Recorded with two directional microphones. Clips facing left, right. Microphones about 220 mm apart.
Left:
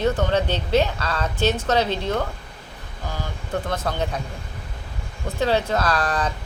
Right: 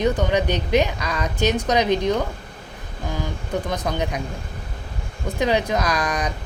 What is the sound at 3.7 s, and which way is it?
Speech, 15° right (ahead or behind).